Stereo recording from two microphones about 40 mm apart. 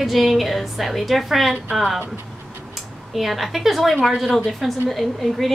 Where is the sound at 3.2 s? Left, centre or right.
Centre.